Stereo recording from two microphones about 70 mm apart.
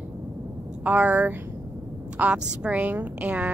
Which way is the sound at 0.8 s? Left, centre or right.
Right.